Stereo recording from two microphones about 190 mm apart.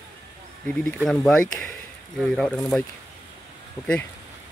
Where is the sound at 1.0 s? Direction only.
5° left (ahead or behind).